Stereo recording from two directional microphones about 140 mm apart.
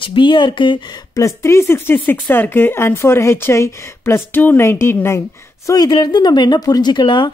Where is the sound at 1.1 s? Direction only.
20° left (ahead or behind).